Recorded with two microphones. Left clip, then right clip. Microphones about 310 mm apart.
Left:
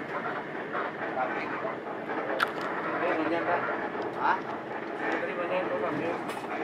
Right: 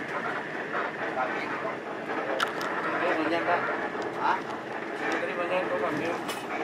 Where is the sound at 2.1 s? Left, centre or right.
Centre.